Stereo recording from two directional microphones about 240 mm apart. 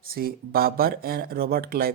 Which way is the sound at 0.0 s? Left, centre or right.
Right.